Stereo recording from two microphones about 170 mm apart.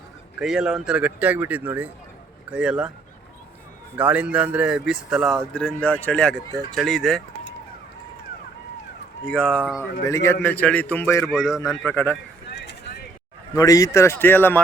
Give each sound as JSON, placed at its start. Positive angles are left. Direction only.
{"t": 0.3, "sound": "a man's voice", "side_deg": -5}
{"t": 3.9, "sound": "a man's voice", "side_deg": -10}
{"t": 9.2, "sound": "speech", "side_deg": 5}
{"t": 9.7, "sound": "a man's voice", "side_deg": 20}
{"t": 11.3, "sound": "speech", "side_deg": 0}
{"t": 11.9, "sound": "a man's voice", "side_deg": 10}
{"t": 12.5, "sound": "a sound", "side_deg": 80}
{"t": 13.5, "sound": "a man's voice", "side_deg": 20}